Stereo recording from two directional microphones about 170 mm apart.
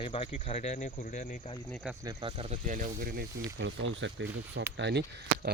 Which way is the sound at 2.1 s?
30° right (ahead or behind).